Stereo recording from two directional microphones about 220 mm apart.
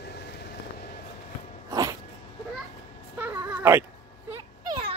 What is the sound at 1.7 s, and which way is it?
Cat, 15° right (ahead or behind).